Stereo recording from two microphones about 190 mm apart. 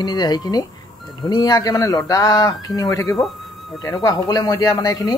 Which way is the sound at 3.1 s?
Centre (ahead or behind).